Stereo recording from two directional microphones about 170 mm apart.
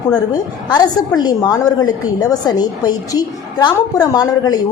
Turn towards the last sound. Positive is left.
turn(degrees=25)  # may be behind; listen again after turning